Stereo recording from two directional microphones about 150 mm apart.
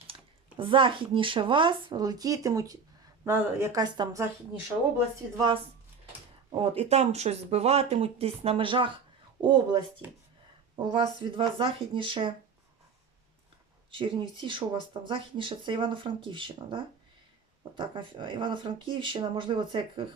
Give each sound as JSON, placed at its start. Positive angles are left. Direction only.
{"t": 0.1, "sound": "a woman's voice", "side_deg": -35}
{"t": 6.5, "sound": "a woman's voice", "side_deg": -40}
{"t": 13.9, "sound": "speech", "side_deg": -35}